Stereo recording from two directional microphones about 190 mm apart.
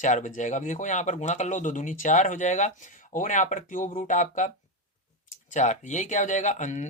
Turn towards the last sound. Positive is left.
turn(degrees=40)  # may be behind; listen again after turning